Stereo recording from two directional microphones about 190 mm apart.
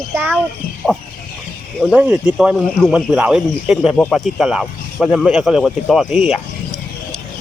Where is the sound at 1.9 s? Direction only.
10° right (ahead or behind).